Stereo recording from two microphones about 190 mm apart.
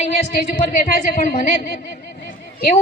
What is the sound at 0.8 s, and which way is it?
Speech, 40° left (ahead or behind).